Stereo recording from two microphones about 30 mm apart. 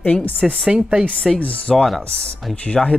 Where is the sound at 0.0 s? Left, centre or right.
Left.